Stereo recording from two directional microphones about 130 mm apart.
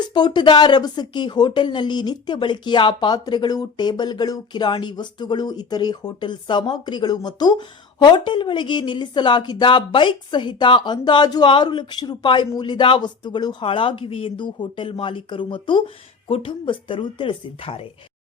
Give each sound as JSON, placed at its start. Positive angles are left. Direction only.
{"t": 0.1, "sound": "speech", "side_deg": 35}